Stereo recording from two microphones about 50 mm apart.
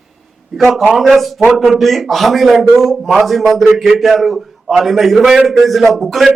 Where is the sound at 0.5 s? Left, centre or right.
Centre.